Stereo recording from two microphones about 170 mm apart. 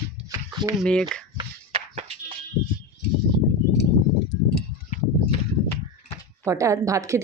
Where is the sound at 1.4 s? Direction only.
40° right (ahead or behind).